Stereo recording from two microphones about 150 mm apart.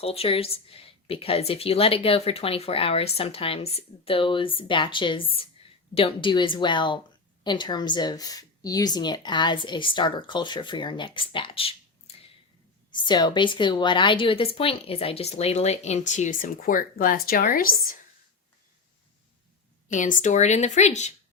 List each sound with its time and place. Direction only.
0.0 s a woman's voice: 40° left (ahead or behind); by 18.0 s 70° left (ahead or behind)
19.9 s a woman's voice: 60° left (ahead or behind)